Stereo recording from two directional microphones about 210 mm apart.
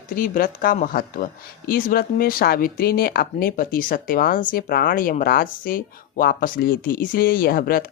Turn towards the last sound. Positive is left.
turn(degrees=45)  # may be behind; listen again after turning